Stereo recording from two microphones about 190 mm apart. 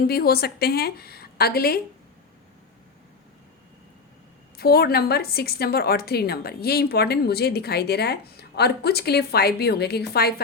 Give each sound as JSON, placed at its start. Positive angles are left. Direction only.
{"t": 0.1, "sound": "a woman's voice", "side_deg": 55}
{"t": 4.5, "sound": "a woman's voice", "side_deg": 55}